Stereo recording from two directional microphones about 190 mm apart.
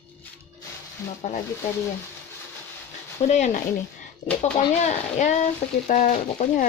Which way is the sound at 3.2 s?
40° left (ahead or behind).